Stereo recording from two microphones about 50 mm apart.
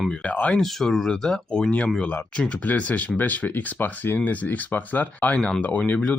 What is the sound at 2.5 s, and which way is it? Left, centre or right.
Speech, left.